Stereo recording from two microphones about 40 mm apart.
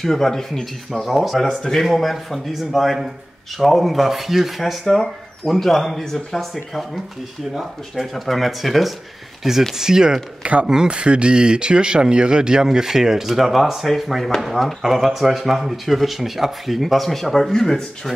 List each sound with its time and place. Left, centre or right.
0.0 s speech: centre
1.0 s speech: centre
1.6 s speech: centre
7.9 s speech: centre
10.4 s speech: right
10.7 s speech: centre
11.0 s speech: right; by 18.1 s centre